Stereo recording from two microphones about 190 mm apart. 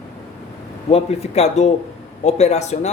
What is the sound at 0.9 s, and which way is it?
Speech, 35° left (ahead or behind).